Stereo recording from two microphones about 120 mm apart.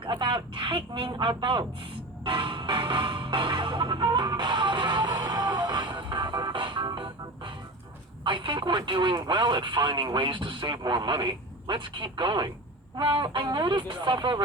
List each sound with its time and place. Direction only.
0.0 s speech: 45° right (ahead or behind)
2.2 s music: 45° right (ahead or behind)
8.2 s speech: 40° right (ahead or behind)